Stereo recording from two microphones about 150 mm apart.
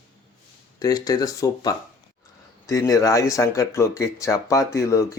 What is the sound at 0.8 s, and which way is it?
Speech, 25° left (ahead or behind).